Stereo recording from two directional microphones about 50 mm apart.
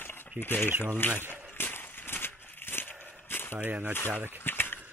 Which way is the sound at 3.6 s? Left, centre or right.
Right.